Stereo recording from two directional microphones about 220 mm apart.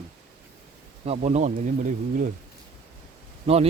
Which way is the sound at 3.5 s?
25° right (ahead or behind).